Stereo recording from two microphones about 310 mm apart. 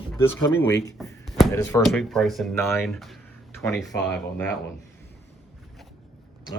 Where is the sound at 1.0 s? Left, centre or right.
Centre.